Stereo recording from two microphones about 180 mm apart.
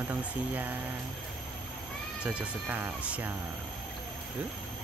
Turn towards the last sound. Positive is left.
turn(degrees=-10)  # may be behind; listen again after turning